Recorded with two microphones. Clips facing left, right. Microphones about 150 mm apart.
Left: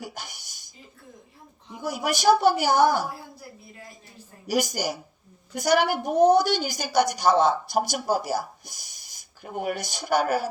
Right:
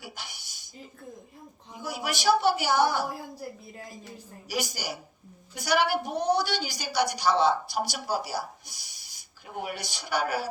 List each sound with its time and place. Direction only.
0.0 s a sound: 45° left (ahead or behind)
1.8 s a woman's voice: 45° left (ahead or behind)
4.4 s a woman's voice: 45° left (ahead or behind)